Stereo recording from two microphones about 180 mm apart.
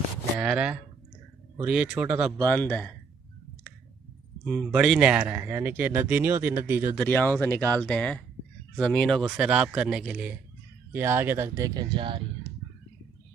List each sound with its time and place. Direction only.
0.4 s speech: 5° right (ahead or behind)
2.4 s speech: 10° left (ahead or behind)
4.5 s speech: 5° right (ahead or behind)
7.0 s speech: 10° left (ahead or behind); by 12.3 s 30° right (ahead or behind)